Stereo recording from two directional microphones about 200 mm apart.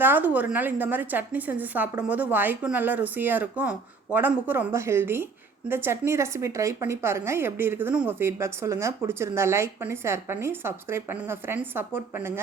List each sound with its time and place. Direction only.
0.0 s a woman's voice: 10° right (ahead or behind)